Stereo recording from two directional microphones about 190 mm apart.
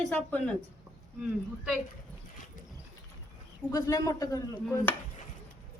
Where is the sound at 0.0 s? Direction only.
5° left (ahead or behind).